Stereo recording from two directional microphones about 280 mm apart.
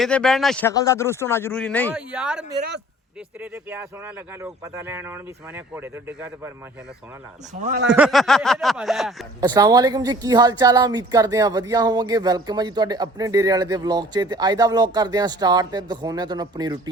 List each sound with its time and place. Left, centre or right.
0.0 s speech: centre
3.4 s speech: centre
7.5 s speech: right
7.9 s speech: centre
9.4 s speech: centre